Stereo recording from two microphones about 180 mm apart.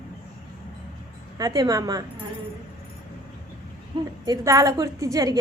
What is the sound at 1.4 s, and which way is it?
Speech, 20° right (ahead or behind).